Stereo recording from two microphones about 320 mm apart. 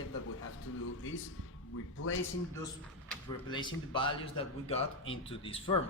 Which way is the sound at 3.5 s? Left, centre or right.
Centre.